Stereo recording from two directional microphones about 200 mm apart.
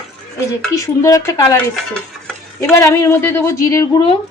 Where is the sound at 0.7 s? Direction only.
15° left (ahead or behind).